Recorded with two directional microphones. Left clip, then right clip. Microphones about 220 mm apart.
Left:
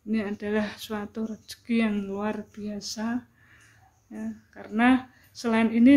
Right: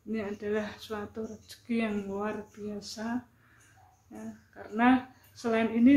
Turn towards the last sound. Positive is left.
turn(degrees=45)  # may be behind; listen again after turning